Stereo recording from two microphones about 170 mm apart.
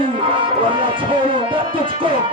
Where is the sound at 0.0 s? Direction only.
30° right (ahead or behind).